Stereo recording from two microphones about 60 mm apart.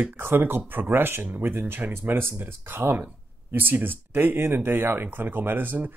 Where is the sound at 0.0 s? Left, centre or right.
Right.